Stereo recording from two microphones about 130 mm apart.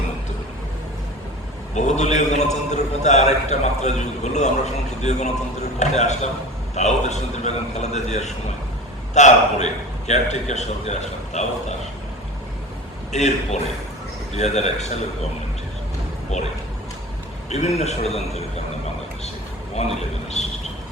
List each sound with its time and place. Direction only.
1.7 s a man's voice: 65° left (ahead or behind)
13.1 s a man's voice: 60° left (ahead or behind)
16.3 s a man's voice: 60° left (ahead or behind)
17.5 s a man's voice: 60° left (ahead or behind)
20.4 s a sound: 60° left (ahead or behind)